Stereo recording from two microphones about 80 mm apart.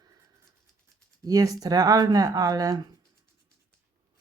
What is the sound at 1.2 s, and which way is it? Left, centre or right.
Speech, right.